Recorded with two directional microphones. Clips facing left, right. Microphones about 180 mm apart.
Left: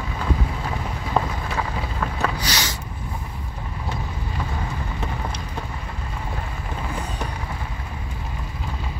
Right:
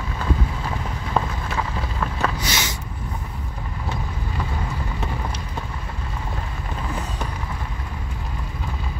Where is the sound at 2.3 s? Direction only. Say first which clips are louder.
Even; 25° right (ahead or behind).